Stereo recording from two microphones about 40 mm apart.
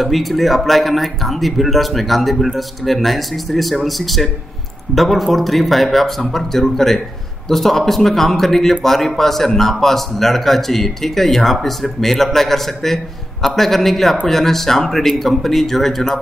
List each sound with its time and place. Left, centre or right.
0.0 s speech: centre